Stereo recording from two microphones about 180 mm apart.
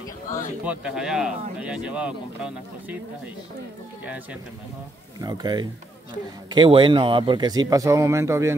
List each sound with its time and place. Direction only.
0.7 s speech: 5° right (ahead or behind)
4.0 s speech: 10° right (ahead or behind)
5.2 s speech: 20° right (ahead or behind)